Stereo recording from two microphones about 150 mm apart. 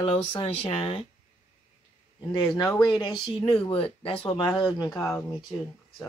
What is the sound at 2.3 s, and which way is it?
Speech, 35° left (ahead or behind).